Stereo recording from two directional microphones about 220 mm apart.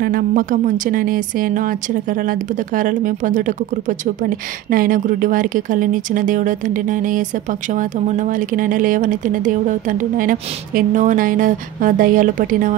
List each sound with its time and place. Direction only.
0.0 s a woman's voice: 40° right (ahead or behind)